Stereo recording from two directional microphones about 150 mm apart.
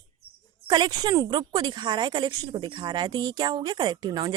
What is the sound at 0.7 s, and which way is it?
A woman's voice, 30° right (ahead or behind).